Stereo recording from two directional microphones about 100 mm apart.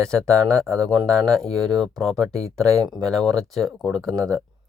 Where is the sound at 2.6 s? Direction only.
35° right (ahead or behind).